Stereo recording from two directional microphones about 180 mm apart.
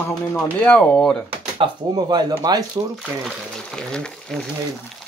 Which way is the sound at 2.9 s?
Centre (ahead or behind).